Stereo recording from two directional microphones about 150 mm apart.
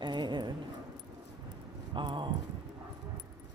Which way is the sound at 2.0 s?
35° right (ahead or behind).